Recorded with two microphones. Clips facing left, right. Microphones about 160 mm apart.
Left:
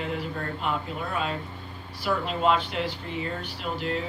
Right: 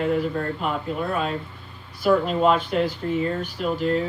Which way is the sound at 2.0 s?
45° right (ahead or behind).